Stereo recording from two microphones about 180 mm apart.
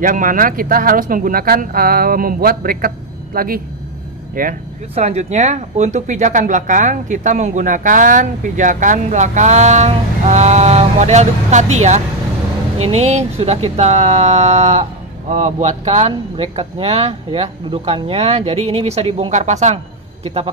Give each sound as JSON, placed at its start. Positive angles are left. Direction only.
{"t": 0.0, "sound": "speech", "side_deg": -50}
{"t": 4.9, "sound": "speech", "side_deg": -40}